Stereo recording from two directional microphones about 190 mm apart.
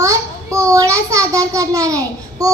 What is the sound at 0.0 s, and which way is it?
A child's voice, 15° right (ahead or behind).